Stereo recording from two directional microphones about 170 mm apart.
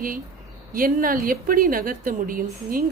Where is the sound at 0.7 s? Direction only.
55° right (ahead or behind).